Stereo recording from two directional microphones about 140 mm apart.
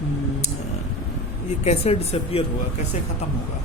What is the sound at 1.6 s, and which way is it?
Speech, 50° left (ahead or behind).